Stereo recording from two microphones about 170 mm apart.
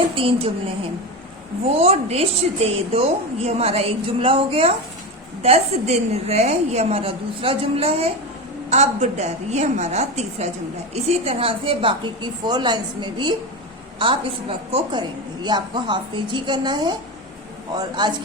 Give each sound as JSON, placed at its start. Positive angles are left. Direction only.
{"t": 0.2, "sound": "a woman's voice", "side_deg": -30}
{"t": 1.6, "sound": "a woman's voice", "side_deg": -35}